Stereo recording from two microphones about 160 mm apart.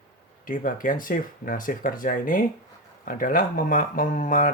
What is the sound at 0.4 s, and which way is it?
Speech, 60° left (ahead or behind).